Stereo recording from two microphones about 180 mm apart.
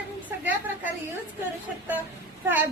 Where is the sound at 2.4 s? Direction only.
10° right (ahead or behind).